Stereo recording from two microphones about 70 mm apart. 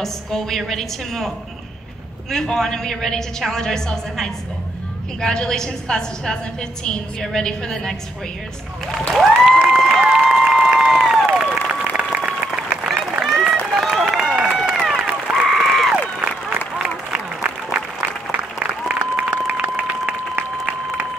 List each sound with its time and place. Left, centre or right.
0.0 s a woman's voice: centre
2.3 s a woman's voice: centre
9.1 s a woman's voice: centre
9.8 s a sound: centre
11.3 s applause: centre
13.4 s run: centre
15.4 s applause: centre
15.9 s a sound: centre
18.3 s applause: centre